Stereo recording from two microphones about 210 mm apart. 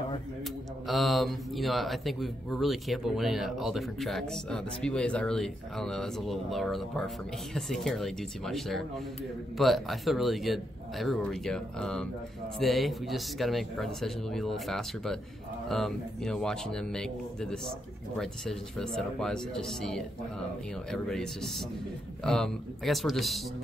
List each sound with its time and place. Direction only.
0.8 s speech: centre (ahead or behind)